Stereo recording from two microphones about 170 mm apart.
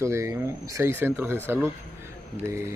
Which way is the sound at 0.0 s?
15° right (ahead or behind).